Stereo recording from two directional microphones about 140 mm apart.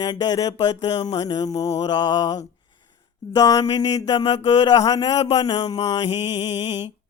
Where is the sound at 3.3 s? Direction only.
25° left (ahead or behind).